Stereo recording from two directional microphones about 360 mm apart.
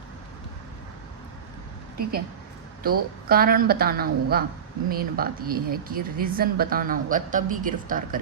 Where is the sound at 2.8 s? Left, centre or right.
Right.